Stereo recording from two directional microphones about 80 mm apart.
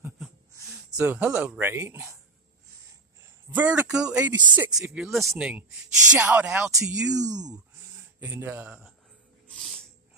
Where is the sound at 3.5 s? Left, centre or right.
Centre.